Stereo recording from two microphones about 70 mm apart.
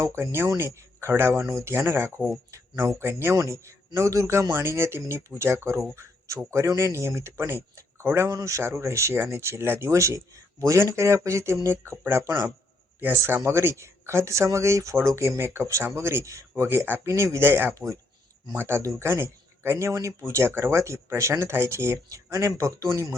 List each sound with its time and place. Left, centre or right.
0.0 s speech: right
3.3 s speech: right
8.4 s speech: right
16.6 s speech: right
17.0 s speech: right
17.5 s speech: right
18.8 s speech: right
19.0 s speech: right